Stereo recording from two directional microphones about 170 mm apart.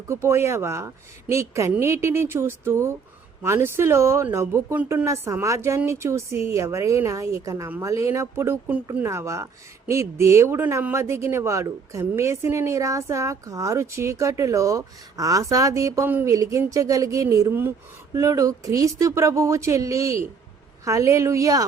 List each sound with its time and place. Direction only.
0.1 s a woman's voice: 15° right (ahead or behind)